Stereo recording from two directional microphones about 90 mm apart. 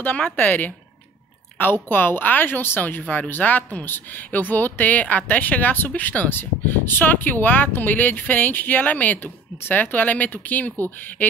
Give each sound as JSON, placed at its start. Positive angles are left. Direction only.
{"t": 0.0, "sound": "speech", "side_deg": 20}